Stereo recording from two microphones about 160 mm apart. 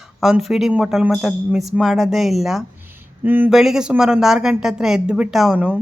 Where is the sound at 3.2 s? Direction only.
10° right (ahead or behind).